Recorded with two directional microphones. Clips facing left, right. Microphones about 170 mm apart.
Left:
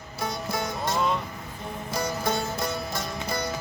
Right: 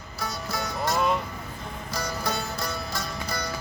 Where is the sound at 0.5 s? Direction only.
25° left (ahead or behind).